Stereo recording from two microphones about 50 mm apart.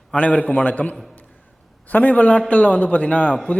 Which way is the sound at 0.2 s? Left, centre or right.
Left.